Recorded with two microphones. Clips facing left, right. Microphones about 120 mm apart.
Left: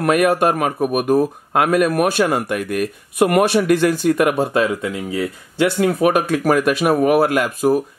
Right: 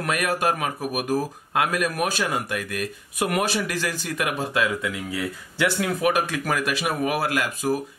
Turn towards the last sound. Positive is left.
turn(degrees=50)  # may be behind; listen again after turning